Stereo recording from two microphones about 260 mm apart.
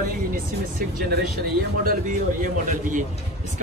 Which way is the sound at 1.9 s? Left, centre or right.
Right.